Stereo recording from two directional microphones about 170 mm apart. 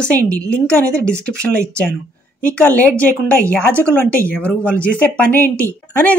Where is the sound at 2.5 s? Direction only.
10° left (ahead or behind).